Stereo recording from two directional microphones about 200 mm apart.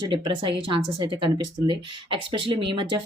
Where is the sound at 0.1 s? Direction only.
25° right (ahead or behind).